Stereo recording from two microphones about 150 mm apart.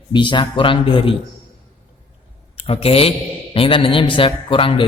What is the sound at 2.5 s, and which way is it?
Speech, 40° left (ahead or behind).